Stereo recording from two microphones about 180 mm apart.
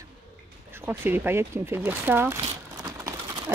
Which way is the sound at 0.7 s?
10° right (ahead or behind).